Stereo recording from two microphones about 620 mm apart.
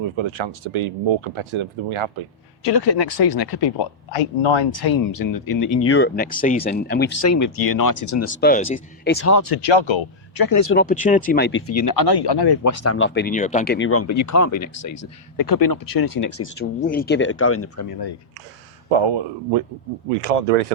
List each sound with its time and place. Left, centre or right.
0.0 s speech: right
2.8 s speech: left
3.8 s speech: left
8.4 s speech: centre
9.2 s speech: left
10.7 s speech: centre; by 12.7 s left
12.8 s speech: centre
16.6 s speech: centre
18.9 s speech: right
20.2 s speech: right